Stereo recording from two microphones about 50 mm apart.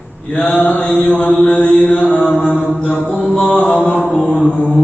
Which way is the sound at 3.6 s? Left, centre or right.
Left.